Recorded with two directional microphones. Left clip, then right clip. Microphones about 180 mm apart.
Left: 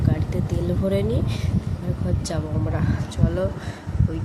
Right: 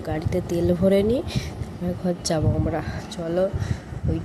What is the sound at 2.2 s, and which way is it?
Speech, 25° right (ahead or behind).